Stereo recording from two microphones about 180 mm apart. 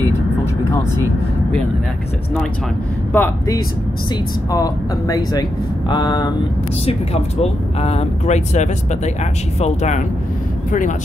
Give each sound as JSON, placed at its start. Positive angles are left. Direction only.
{"t": 3.1, "sound": "speech", "side_deg": 10}
{"t": 7.4, "sound": "speech", "side_deg": 35}